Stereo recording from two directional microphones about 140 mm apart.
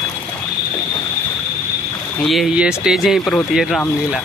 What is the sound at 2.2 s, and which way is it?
Speech, centre (ahead or behind).